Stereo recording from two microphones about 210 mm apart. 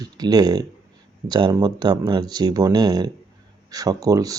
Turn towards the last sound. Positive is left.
turn(degrees=-15)  # may be behind; listen again after turning